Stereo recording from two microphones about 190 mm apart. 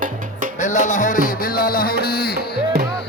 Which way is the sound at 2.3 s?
60° right (ahead or behind).